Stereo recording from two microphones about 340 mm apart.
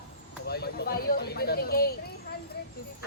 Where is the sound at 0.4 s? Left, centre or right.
Left.